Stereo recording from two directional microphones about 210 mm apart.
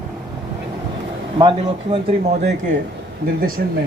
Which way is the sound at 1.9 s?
35° right (ahead or behind).